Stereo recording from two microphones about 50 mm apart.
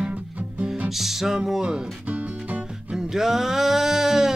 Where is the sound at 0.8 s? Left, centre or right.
Centre.